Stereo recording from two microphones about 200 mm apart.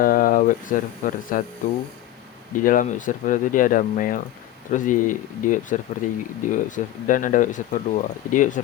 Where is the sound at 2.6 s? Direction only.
45° left (ahead or behind).